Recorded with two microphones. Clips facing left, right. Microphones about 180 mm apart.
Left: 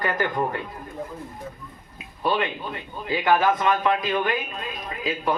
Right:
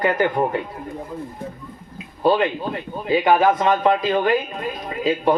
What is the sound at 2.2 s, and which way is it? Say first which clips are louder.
A man's voice: right 7 dB; 30° right (ahead or behind).